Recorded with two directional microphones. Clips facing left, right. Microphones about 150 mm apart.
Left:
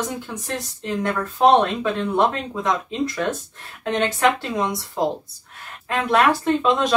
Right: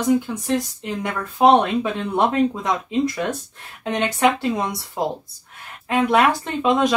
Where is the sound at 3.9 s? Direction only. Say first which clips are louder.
Left 1 dB; 15° right (ahead or behind).